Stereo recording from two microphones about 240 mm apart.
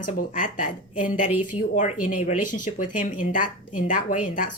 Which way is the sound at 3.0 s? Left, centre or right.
Left.